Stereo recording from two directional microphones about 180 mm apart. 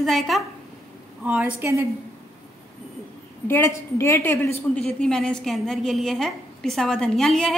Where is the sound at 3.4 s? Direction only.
15° left (ahead or behind).